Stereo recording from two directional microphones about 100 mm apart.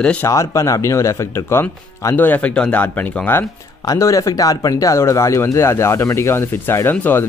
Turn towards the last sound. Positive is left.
turn(degrees=20)  # may be behind; listen again after turning